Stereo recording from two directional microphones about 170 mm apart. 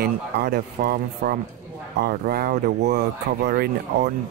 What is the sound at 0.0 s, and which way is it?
Speech, 65° right (ahead or behind).